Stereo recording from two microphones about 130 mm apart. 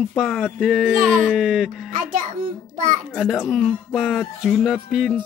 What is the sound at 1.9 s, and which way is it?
Speech, 90° right.